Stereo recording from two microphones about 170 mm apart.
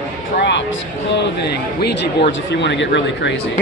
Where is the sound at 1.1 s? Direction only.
80° left.